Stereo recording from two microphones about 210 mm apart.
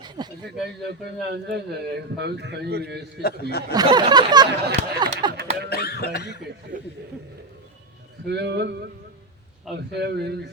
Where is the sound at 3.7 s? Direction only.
20° right (ahead or behind).